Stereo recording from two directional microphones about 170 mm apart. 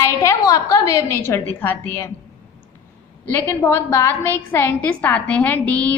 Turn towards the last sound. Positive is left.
turn(degrees=10)  # may be behind; listen again after turning